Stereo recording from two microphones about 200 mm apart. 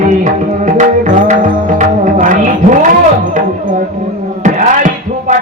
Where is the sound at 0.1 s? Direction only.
35° right (ahead or behind).